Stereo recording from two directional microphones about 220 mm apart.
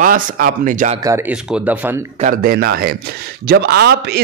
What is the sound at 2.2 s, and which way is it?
Speech, 40° right (ahead or behind).